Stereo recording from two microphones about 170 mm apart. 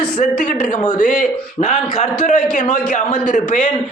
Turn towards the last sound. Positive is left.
turn(degrees=50)  # may be behind; listen again after turning